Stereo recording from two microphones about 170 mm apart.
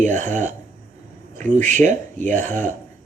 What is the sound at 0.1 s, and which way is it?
Speech, 45° right (ahead or behind).